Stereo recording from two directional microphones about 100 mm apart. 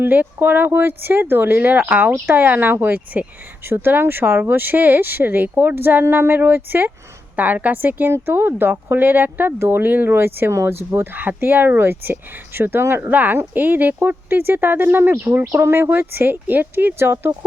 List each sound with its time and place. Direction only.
0.0 s a woman's voice: 20° right (ahead or behind)